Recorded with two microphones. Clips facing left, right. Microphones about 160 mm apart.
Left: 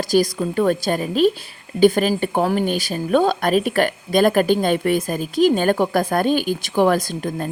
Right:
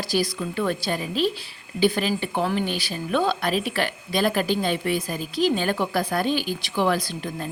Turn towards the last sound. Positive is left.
turn(degrees=45)  # may be behind; listen again after turning